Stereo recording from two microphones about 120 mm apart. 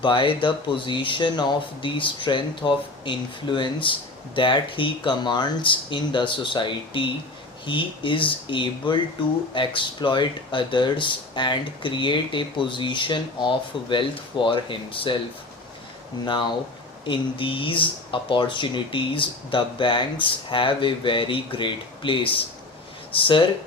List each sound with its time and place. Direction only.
0.0 s speech: 45° left (ahead or behind)
16.2 s speech: 40° left (ahead or behind)